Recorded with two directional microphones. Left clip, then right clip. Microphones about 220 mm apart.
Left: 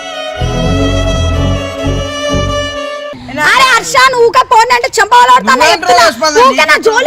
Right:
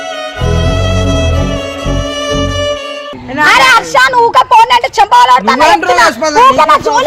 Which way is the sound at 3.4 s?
30° left (ahead or behind).